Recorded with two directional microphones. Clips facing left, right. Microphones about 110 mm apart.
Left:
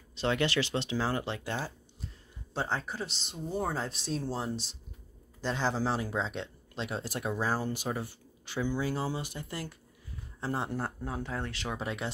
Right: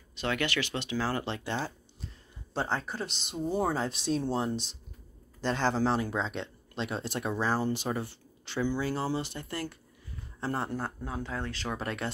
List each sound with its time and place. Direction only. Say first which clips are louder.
0.1 s speech: left 2 dB; 30° left (ahead or behind)
1.1 s speech: right 1 dB; 10° left (ahead or behind)
2.7 s speech: right 1 dB; 5° left (ahead or behind); by 11.8 s 20° left (ahead or behind)
11.8 s speech: even; 10° left (ahead or behind)